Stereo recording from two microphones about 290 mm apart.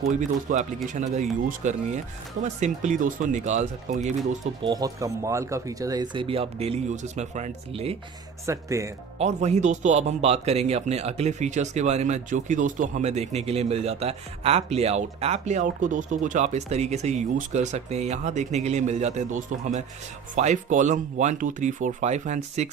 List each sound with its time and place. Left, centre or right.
0.0 s speech: right
8.4 s speech: centre
9.1 s speech: right